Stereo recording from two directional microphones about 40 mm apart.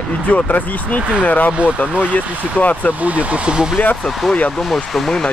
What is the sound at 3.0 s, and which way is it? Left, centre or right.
Speech, right.